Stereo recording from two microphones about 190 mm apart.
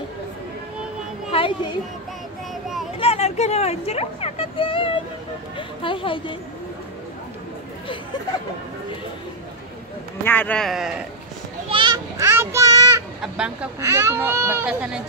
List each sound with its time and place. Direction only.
1.3 s speech: 25° left (ahead or behind)
3.0 s speech: 30° left (ahead or behind)
10.2 s speech: 10° left (ahead or behind)
11.7 s children playing: 20° right (ahead or behind)
13.2 s speech: 5° right (ahead or behind)